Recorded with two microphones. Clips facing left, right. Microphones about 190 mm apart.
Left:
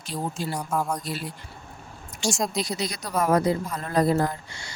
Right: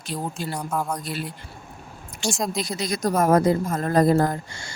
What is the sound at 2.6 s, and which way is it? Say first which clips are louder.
Speech: right 5 dB; 50° right (ahead or behind).